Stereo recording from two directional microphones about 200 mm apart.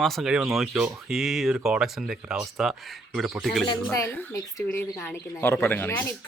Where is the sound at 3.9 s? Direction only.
10° left (ahead or behind).